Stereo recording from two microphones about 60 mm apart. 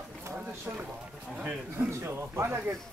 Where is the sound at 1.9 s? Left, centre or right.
Right.